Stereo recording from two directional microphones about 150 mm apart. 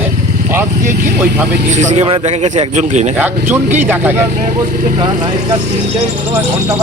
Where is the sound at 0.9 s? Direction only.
65° right (ahead or behind).